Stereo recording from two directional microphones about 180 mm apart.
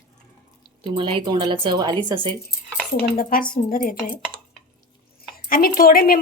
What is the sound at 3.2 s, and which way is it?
Speech, 50° left (ahead or behind).